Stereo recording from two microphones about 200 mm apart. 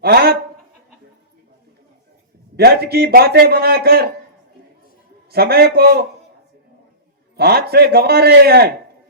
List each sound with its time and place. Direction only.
0.0 s a man's voice: 50° right (ahead or behind)
2.6 s a man's voice: 50° right (ahead or behind)
5.3 s a man's voice: 50° right (ahead or behind)
7.3 s a man's voice: 50° right (ahead or behind)